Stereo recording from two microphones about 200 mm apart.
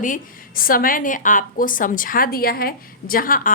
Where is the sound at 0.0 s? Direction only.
45° left (ahead or behind).